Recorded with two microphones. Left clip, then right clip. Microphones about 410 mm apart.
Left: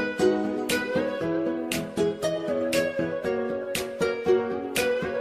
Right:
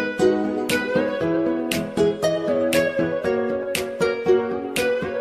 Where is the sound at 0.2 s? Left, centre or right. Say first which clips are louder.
Right 5 dB; right.